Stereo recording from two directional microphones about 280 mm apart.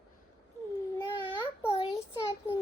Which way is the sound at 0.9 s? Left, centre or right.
Centre.